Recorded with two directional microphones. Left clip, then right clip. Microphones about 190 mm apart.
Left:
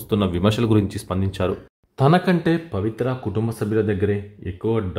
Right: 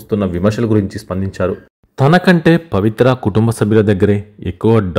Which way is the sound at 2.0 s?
25° right (ahead or behind).